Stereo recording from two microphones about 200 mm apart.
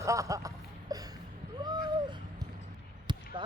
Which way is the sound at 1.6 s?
20° right (ahead or behind).